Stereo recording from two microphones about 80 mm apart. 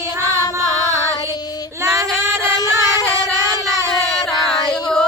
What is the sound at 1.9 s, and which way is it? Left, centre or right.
Music, centre.